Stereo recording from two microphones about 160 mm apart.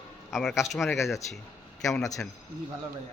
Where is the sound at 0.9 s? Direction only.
20° left (ahead or behind).